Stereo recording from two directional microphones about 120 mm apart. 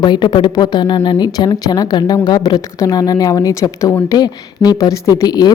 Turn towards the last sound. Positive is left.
turn(degrees=35)  # may be behind; listen again after turning